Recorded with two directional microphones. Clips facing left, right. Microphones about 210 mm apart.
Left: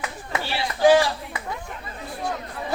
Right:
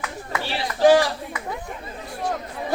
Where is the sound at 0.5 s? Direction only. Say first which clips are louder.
Right 1 dB; 40° right (ahead or behind).